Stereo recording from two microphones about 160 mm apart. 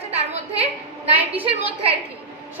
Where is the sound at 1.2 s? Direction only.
10° right (ahead or behind).